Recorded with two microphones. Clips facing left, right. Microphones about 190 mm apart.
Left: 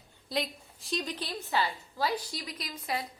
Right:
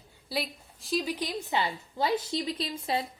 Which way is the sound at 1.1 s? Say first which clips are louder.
Right 2 dB; 15° right (ahead or behind).